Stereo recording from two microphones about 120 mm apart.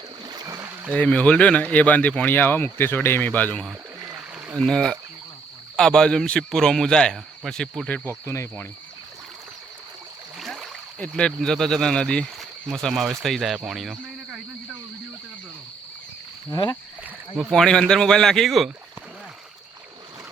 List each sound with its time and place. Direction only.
0.3 s rowboat: 30° right (ahead or behind)
0.9 s speech: 10° left (ahead or behind)
8.2 s speech: 25° left (ahead or behind)
10.3 s a sound: centre (ahead or behind)
11.0 s speech: 5° left (ahead or behind)
16.5 s speech: 35° left (ahead or behind)
17.5 s speech: 5° left (ahead or behind)